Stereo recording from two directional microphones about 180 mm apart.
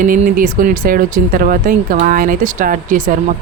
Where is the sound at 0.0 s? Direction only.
50° right (ahead or behind).